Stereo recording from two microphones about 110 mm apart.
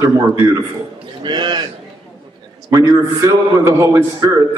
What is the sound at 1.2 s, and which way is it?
Speech, 45° right (ahead or behind).